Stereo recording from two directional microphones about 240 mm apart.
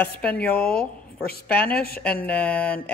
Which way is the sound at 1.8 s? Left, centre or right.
Left.